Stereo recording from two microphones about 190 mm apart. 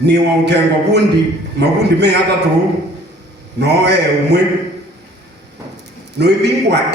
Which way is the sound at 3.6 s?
60° right (ahead or behind).